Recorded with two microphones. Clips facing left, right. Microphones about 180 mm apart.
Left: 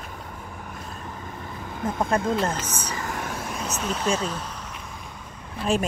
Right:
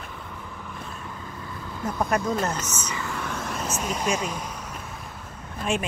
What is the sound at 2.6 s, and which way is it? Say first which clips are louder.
Vehicle: left 1 dB; 30° left (ahead or behind).